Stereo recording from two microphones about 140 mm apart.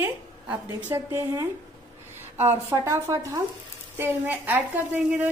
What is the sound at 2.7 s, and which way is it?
A woman's voice, 20° right (ahead or behind).